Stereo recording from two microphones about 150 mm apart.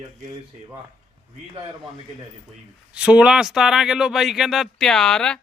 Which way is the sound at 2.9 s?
10° right (ahead or behind).